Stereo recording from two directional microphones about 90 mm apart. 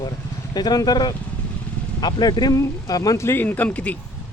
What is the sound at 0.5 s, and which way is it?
Speech, 50° left (ahead or behind).